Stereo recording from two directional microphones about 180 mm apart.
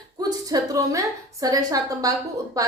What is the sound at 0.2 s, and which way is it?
A woman's voice, 20° right (ahead or behind).